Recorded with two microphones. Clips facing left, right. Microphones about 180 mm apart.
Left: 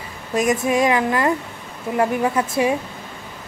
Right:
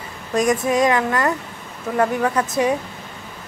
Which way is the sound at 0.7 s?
25° left (ahead or behind).